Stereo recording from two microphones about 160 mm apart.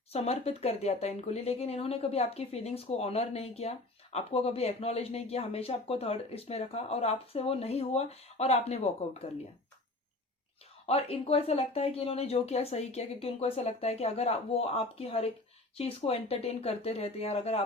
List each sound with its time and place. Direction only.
0.1 s speech: 40° left (ahead or behind)
10.8 s speech: 40° left (ahead or behind)